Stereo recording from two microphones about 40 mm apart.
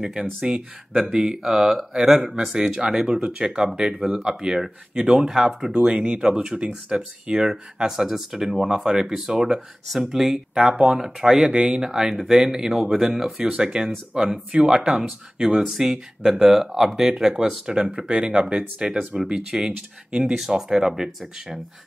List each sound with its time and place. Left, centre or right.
0.0 s speech: centre
6.3 s speech: centre
11.5 s speech: right